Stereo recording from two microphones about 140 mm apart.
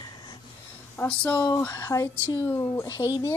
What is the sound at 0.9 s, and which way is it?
A woman's voice, 10° left (ahead or behind).